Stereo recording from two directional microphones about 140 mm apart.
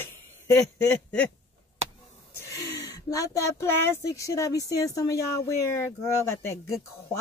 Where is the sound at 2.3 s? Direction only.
20° left (ahead or behind).